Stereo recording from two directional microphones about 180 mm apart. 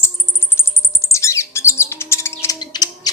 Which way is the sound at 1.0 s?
15° left (ahead or behind).